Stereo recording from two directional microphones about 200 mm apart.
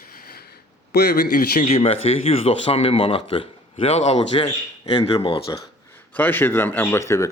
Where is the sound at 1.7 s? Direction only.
30° left (ahead or behind).